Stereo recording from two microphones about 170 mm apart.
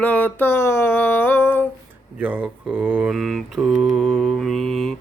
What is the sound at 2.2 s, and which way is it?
Mantra, 5° right (ahead or behind).